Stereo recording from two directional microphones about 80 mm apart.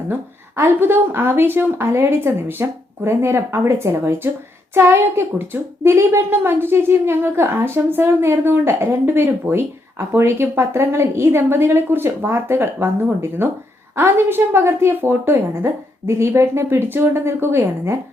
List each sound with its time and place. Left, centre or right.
0.1 s a woman's voice: right